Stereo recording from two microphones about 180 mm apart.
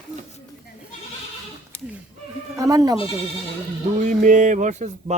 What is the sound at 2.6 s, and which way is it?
Speech, 20° right (ahead or behind).